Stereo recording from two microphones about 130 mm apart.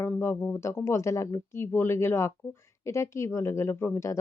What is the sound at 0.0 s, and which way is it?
Speech, 20° left (ahead or behind).